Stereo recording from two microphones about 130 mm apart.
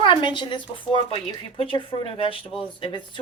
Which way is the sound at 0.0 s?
40° left (ahead or behind).